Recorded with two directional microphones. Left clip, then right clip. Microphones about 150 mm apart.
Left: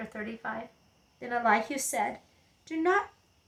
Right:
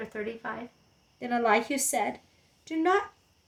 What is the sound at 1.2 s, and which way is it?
Speech, 20° right (ahead or behind).